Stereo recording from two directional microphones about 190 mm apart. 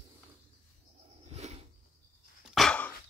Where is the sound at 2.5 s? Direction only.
5° left (ahead or behind).